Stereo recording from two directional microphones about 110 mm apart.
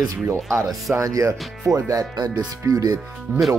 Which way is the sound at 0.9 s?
30° right (ahead or behind).